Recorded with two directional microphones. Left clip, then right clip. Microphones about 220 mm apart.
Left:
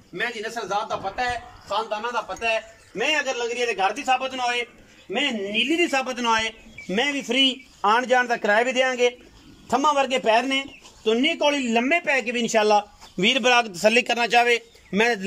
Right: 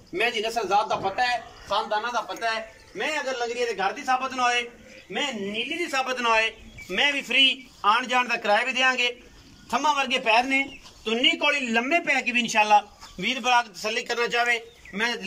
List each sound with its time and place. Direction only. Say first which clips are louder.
0.1 s a man's voice: right 3 dB; 10° right (ahead or behind); by 5.2 s 10° left (ahead or behind)
5.8 s a man's voice: left 3 dB; 30° left (ahead or behind)
13.2 s a man's voice: left 4 dB; 50° left (ahead or behind)